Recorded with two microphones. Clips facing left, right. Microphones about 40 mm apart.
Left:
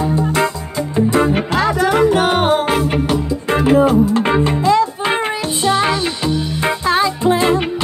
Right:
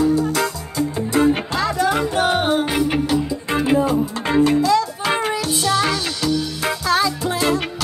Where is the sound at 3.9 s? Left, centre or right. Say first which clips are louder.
Left 5 dB; left.